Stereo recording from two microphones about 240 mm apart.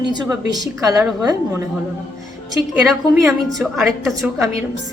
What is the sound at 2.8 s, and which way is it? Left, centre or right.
A woman's voice, centre.